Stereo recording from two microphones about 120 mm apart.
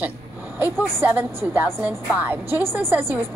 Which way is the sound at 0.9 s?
20° right (ahead or behind).